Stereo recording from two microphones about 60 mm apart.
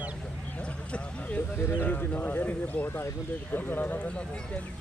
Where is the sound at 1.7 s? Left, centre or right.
Left.